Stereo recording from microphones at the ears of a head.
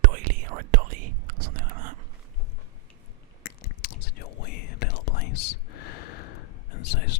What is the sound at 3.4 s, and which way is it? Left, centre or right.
Whispering, left.